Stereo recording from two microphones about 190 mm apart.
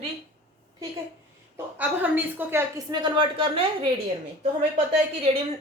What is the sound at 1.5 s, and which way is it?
A woman's voice, 10° right (ahead or behind).